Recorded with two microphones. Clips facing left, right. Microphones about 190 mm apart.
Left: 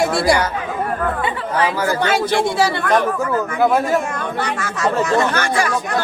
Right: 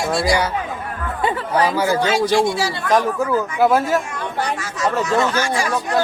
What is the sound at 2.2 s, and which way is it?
Speech, 55° left (ahead or behind).